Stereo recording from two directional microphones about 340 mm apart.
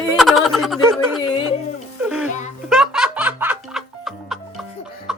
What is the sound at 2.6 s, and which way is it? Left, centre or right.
Music, centre.